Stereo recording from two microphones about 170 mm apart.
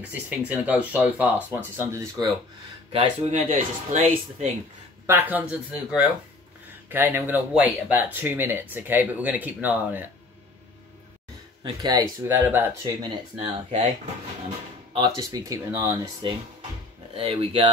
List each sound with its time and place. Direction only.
0.5 s speech: 10° right (ahead or behind)
2.9 s speech: 40° right (ahead or behind)
5.0 s speech: 10° right (ahead or behind)
11.6 s speech: 25° right (ahead or behind)
12.3 s speech: 10° right (ahead or behind)
13.0 s speech: 40° right (ahead or behind)
14.9 s speech: 25° right (ahead or behind)
17.1 s speech: 35° right (ahead or behind)